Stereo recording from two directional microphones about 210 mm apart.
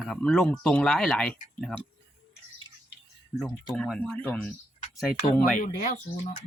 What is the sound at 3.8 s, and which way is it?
Speech, 5° left (ahead or behind).